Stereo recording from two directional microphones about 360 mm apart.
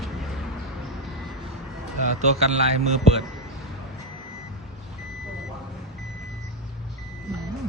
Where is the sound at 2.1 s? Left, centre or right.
Centre.